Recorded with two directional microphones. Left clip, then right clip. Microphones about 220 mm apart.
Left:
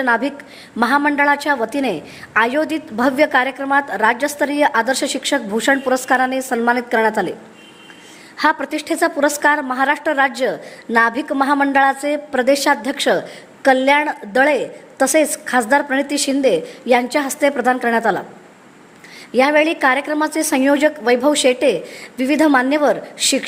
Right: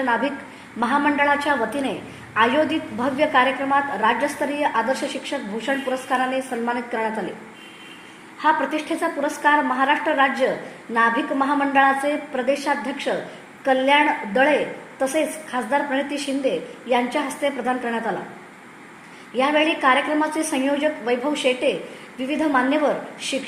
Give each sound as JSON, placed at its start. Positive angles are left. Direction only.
{"t": 0.0, "sound": "a woman's voice", "side_deg": 35}
{"t": 8.4, "sound": "a woman's voice", "side_deg": 45}
{"t": 19.4, "sound": "a woman's voice", "side_deg": 40}